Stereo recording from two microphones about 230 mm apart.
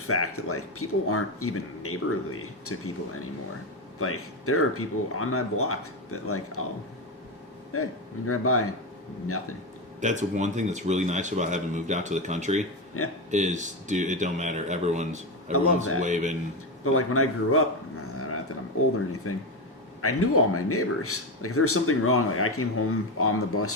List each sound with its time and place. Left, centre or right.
0.0 s speech: left
7.7 s speech: left
10.0 s speech: right
13.0 s speech: left
13.3 s speech: right
15.5 s speech: left
16.0 s speech: right
16.8 s speech: left
19.3 s speech: left